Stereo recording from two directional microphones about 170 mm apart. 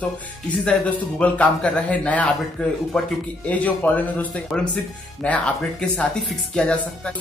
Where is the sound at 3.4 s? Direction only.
10° left (ahead or behind).